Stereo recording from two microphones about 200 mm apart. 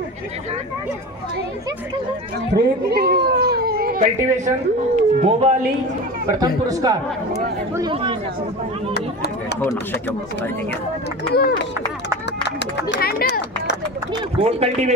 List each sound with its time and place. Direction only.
2.5 s speech: 50° right (ahead or behind); by 5.5 s 30° right (ahead or behind)
6.3 s speech: 20° right (ahead or behind)
8.9 s speech: 55° left (ahead or behind)
9.6 s speech: 10° left (ahead or behind)
11.3 s speech: 50° left (ahead or behind)
12.4 s a sound: 60° left (ahead or behind)
14.4 s speech: 35° right (ahead or behind)